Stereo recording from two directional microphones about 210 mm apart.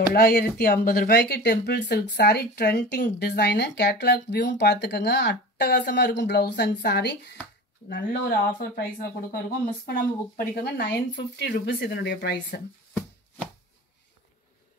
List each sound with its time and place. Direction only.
0.1 s speech: 45° left (ahead or behind)
9.8 s speech: 50° left (ahead or behind)